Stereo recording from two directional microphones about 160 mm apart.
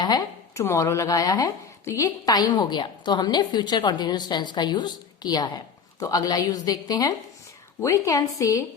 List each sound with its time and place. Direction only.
0.0 s speech: 20° left (ahead or behind)